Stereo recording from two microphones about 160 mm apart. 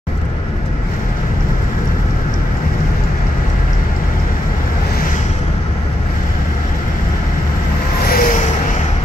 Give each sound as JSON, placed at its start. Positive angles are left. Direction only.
{"t": 8.1, "sound": "vehicle", "side_deg": 60}